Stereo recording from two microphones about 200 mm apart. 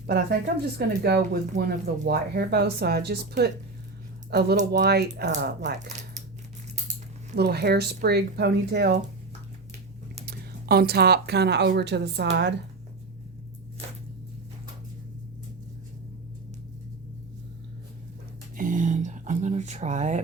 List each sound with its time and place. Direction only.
0.8 s speech: 50° right (ahead or behind)
7.3 s speech: 55° right (ahead or behind)
10.2 s speech: 50° right (ahead or behind)
18.5 s a sound: 40° right (ahead or behind)